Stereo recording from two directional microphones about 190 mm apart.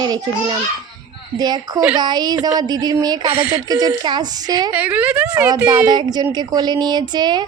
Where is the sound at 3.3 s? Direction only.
5° right (ahead or behind).